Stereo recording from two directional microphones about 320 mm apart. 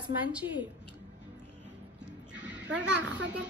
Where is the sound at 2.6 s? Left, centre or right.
Right.